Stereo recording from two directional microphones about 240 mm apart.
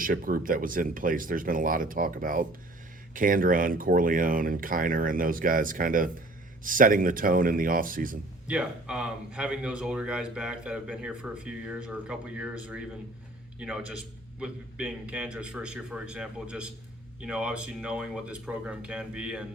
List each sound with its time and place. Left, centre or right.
0.0 s speech: right
8.4 s speech: centre